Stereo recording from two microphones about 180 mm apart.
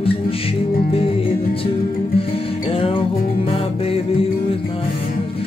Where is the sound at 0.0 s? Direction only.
30° left (ahead or behind).